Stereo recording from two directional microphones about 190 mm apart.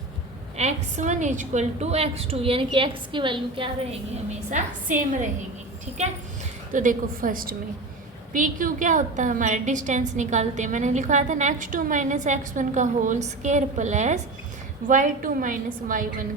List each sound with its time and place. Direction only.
0.5 s a woman's voice: 35° right (ahead or behind)
4.5 s a woman's voice: 40° right (ahead or behind)